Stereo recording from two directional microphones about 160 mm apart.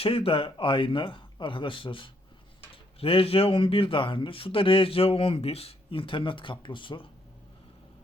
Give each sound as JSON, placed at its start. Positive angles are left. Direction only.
{"t": 0.0, "sound": "speech", "side_deg": 35}